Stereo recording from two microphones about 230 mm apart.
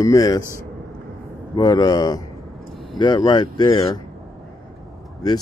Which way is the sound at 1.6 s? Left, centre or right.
Centre.